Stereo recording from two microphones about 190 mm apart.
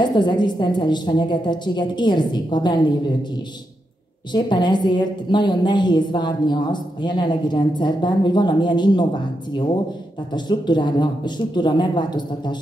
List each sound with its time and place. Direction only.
0.0 s a woman's voice: 25° left (ahead or behind)
4.3 s a woman's voice: 25° left (ahead or behind)